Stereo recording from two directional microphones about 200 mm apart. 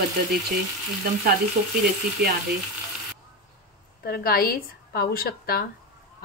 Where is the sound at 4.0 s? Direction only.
50° left (ahead or behind).